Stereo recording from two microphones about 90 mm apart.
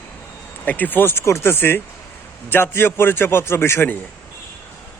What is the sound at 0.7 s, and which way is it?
Speech, 20° left (ahead or behind).